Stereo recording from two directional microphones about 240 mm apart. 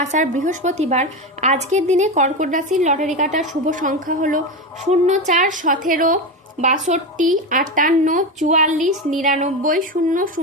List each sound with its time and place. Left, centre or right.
0.0 s a woman's voice: right